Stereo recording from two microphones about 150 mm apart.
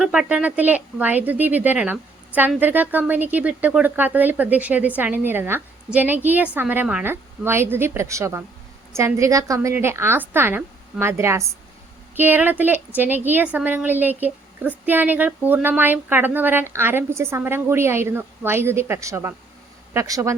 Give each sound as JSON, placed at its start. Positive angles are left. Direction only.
{"t": 0.0, "sound": "a woman's voice", "side_deg": -5}